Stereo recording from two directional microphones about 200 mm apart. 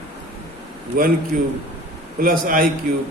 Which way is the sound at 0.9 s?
45° right (ahead or behind).